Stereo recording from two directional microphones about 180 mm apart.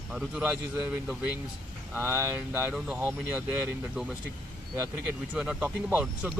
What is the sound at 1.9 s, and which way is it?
Speech, 15° right (ahead or behind).